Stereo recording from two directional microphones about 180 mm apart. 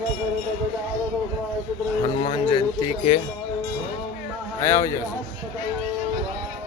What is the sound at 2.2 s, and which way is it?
Speech, 25° left (ahead or behind).